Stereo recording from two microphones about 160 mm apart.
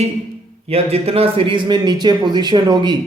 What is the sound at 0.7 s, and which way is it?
Speech, 40° right (ahead or behind).